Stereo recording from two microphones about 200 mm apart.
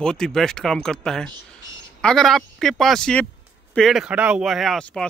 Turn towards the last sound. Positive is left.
turn(degrees=5)  # may be behind; listen again after turning